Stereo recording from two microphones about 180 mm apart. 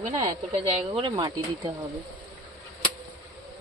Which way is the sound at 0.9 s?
25° right (ahead or behind).